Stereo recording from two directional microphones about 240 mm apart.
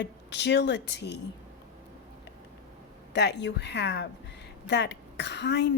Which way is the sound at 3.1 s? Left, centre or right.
Left.